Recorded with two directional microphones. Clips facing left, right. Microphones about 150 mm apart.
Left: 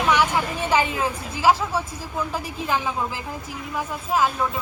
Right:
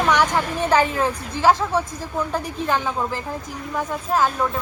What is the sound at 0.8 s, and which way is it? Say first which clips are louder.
Speech: right 3 dB; 40° right (ahead or behind).